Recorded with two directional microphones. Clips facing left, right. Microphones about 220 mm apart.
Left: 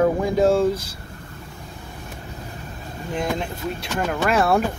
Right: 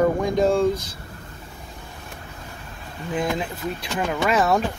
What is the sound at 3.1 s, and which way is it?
Speech, 5° right (ahead or behind).